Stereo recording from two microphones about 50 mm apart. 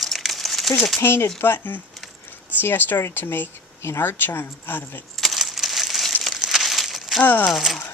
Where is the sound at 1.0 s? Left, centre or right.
Left.